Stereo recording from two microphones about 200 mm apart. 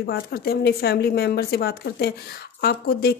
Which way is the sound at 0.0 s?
50° left (ahead or behind).